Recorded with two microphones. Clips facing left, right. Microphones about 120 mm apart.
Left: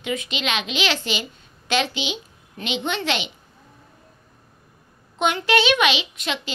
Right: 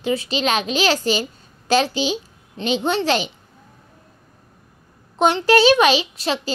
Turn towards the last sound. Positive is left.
turn(degrees=-35)  # may be behind; listen again after turning